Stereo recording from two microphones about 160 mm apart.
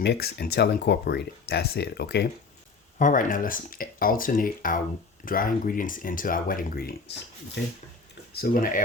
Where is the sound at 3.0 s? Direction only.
55° left (ahead or behind).